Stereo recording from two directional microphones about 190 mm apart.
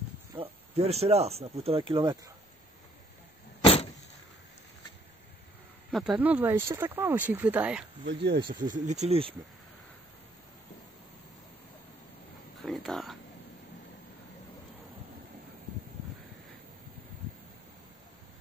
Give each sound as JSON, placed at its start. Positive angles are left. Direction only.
{"t": 0.4, "sound": "speech", "side_deg": -35}
{"t": 3.6, "sound": "vehicle", "side_deg": 30}
{"t": 5.9, "sound": "speech", "side_deg": 0}
{"t": 8.1, "sound": "speech", "side_deg": -65}
{"t": 8.5, "sound": "speech", "side_deg": -45}
{"t": 12.6, "sound": "speech", "side_deg": 0}